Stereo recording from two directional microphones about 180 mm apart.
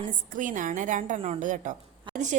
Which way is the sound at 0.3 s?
45° right (ahead or behind).